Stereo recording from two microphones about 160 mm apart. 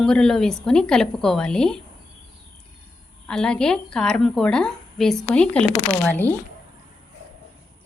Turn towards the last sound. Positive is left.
turn(degrees=10)  # may be behind; listen again after turning